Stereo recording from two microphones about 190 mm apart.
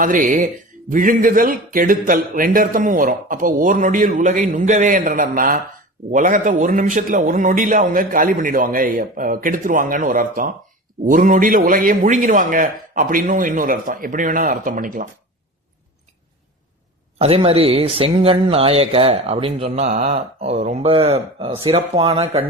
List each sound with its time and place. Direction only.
0.0 s a man's voice: 45° right (ahead or behind)
17.2 s speech: 30° right (ahead or behind)